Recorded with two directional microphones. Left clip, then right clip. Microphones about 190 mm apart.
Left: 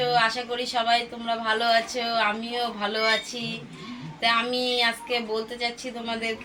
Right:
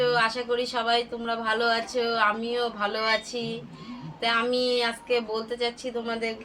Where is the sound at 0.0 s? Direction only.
25° right (ahead or behind).